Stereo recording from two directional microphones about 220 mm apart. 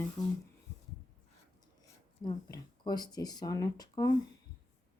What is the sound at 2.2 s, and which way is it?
Speech, 20° left (ahead or behind).